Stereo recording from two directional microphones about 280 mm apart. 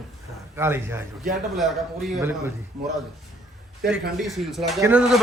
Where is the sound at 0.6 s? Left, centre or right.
Centre.